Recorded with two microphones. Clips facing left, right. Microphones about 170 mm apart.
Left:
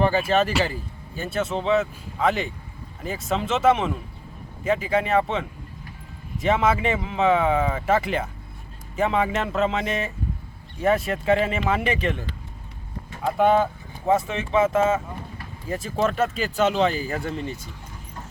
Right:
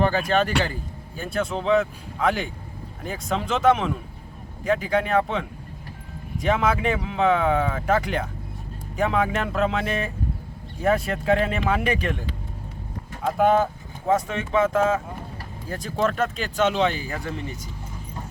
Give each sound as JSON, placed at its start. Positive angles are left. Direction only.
{"t": 0.0, "sound": "speech", "side_deg": 5}
{"t": 13.2, "sound": "speech", "side_deg": 0}
{"t": 17.0, "sound": "speech", "side_deg": 35}